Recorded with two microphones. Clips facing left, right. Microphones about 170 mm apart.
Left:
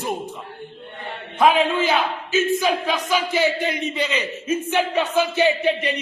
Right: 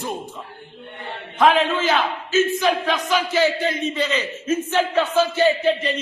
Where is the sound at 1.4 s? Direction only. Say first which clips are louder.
Even; 10° left (ahead or behind).